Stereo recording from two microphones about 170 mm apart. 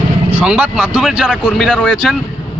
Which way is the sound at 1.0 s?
Centre (ahead or behind).